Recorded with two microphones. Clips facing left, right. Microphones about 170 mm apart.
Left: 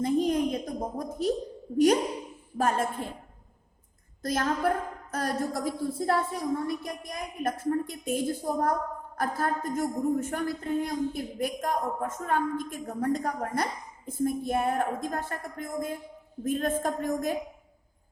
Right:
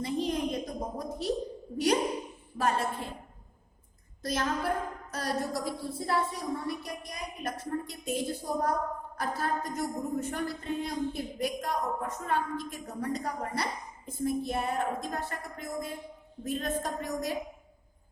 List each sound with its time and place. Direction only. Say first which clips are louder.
0.0 s a sound: left 5 dB; 50° left (ahead or behind)
2.6 s speech: left 2 dB; 45° left (ahead or behind)
4.2 s speech: left 4 dB; 50° left (ahead or behind)